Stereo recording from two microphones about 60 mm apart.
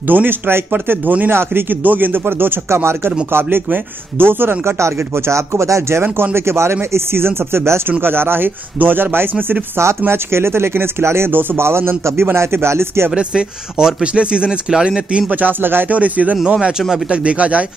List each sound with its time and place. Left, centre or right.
0.0 s speech: right
9.8 s speech: right
13.1 s speech: centre